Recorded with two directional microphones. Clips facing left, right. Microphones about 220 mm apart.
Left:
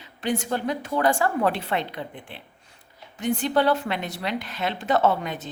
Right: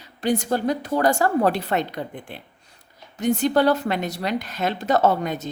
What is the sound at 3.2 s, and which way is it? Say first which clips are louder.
A woman's voice: right 4 dB; 45° right (ahead or behind).